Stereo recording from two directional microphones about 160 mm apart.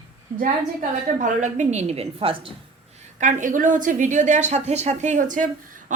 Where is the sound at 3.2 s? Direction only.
50° right (ahead or behind).